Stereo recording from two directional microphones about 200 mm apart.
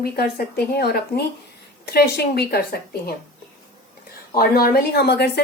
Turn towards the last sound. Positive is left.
turn(degrees=55)  # may be behind; listen again after turning